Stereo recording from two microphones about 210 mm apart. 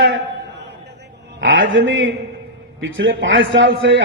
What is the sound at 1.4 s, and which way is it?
A man's voice, 60° right (ahead or behind).